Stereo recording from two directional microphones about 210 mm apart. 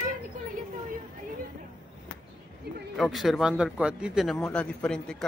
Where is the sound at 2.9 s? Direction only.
Centre (ahead or behind).